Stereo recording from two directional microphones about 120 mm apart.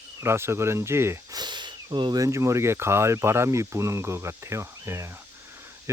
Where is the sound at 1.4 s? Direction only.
40° right (ahead or behind).